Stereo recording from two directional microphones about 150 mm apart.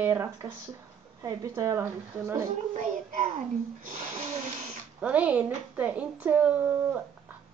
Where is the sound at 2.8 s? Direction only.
60° right (ahead or behind).